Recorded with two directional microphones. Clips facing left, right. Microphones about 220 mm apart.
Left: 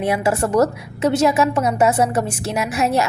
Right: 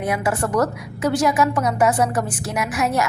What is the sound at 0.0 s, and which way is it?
A woman's voice, 25° left (ahead or behind).